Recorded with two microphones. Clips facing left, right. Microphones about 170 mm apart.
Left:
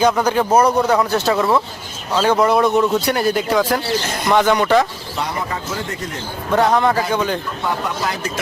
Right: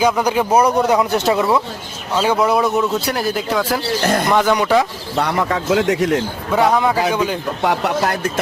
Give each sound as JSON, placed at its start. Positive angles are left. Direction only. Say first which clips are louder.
{"t": 0.0, "sound": "speech", "louder": "even", "side_deg": -10}
{"t": 1.4, "sound": "speech", "louder": "even", "side_deg": -10}
{"t": 4.0, "sound": "speech", "louder": "right 8 dB", "side_deg": -55}
{"t": 4.3, "sound": "speech", "louder": "left 3 dB", "side_deg": -5}
{"t": 5.1, "sound": "speech", "louder": "right 6 dB", "side_deg": -65}
{"t": 6.5, "sound": "speech", "louder": "even", "side_deg": -5}
{"t": 7.6, "sound": "speech", "louder": "right 8 dB", "side_deg": -70}